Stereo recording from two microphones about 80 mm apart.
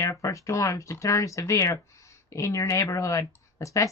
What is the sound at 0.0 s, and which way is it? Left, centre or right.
Speech, left.